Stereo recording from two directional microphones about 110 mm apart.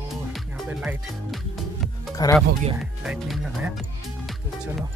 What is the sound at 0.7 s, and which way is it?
Speech, 10° right (ahead or behind).